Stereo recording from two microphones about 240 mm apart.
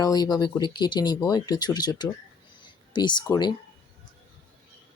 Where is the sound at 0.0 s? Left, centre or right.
Centre.